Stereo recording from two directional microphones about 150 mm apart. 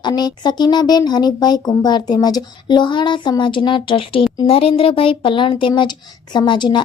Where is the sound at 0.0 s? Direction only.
25° left (ahead or behind).